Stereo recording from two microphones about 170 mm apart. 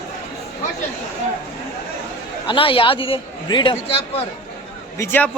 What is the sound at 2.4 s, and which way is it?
A man's voice, 30° left (ahead or behind).